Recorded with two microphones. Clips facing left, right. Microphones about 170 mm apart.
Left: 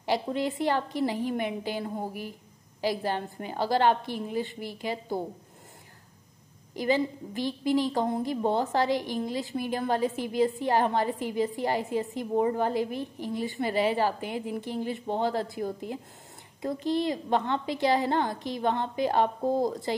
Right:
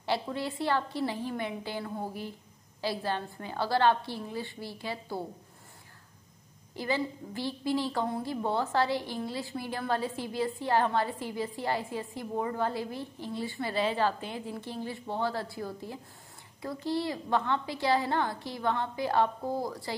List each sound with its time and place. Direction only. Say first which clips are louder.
0.0 s a woman's voice: left 4 dB; 15° left (ahead or behind)
6.7 s a woman's voice: left 5 dB; 15° left (ahead or behind)